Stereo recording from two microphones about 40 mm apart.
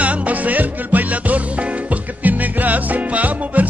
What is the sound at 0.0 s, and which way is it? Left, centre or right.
Music, right.